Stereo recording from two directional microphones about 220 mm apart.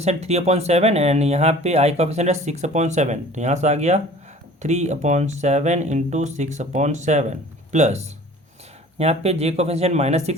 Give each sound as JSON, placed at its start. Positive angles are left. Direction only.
{"t": 0.0, "sound": "speech", "side_deg": -30}